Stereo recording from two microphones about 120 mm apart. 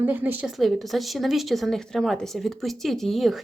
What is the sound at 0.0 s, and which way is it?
Speech, 15° right (ahead or behind).